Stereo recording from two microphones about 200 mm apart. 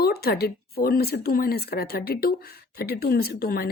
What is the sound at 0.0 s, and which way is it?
Speech, 50° left (ahead or behind).